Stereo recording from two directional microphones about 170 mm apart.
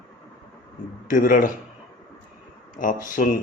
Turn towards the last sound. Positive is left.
turn(degrees=50)  # may be behind; listen again after turning